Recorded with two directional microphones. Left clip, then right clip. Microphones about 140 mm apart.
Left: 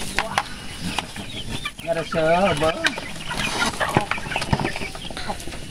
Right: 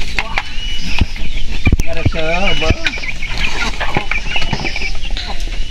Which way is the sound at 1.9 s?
5° left (ahead or behind).